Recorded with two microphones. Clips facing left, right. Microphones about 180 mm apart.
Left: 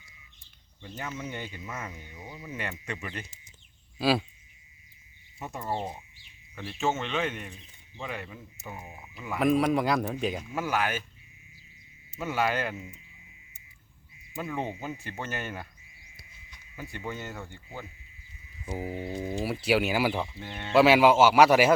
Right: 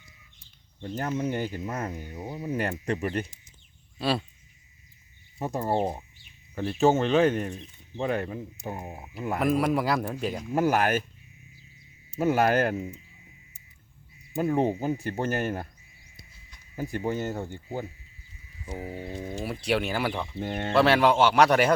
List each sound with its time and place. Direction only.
0.8 s speech: 50° right (ahead or behind)
3.9 s speech: centre (ahead or behind)
5.4 s speech: 35° right (ahead or behind)
9.4 s speech: centre (ahead or behind)
10.5 s speech: 50° right (ahead or behind)
12.2 s speech: 45° right (ahead or behind)
14.4 s speech: 40° right (ahead or behind)
16.7 s speech: 40° right (ahead or behind)
18.6 s speech: 10° left (ahead or behind)
20.4 s speech: 50° right (ahead or behind)
20.7 s speech: 5° left (ahead or behind)